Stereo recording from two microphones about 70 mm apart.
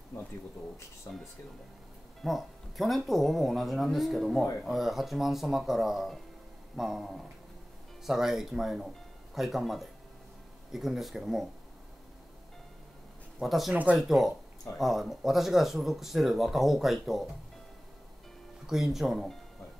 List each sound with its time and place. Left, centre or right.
1.1 s speech: left
2.2 s speech: centre
13.4 s speech: centre
18.7 s speech: centre